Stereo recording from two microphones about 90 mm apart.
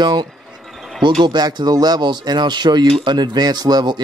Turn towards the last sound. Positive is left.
turn(degrees=-50)  # may be behind; listen again after turning